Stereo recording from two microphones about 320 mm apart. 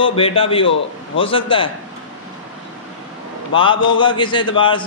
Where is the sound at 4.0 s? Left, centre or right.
Centre.